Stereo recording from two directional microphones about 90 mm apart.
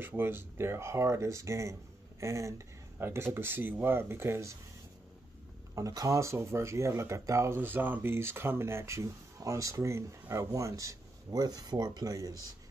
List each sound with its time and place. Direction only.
0.0 s speech: 25° right (ahead or behind)
5.8 s speech: 40° right (ahead or behind)